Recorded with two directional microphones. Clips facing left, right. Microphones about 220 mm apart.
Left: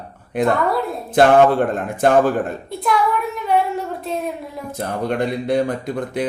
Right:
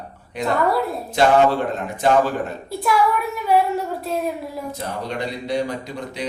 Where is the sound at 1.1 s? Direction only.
50° left (ahead or behind).